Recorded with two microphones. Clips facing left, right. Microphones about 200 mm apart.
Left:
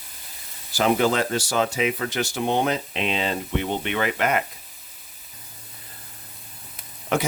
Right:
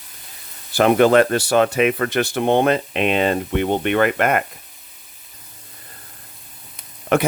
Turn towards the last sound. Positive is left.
turn(degrees=-60)  # may be behind; listen again after turning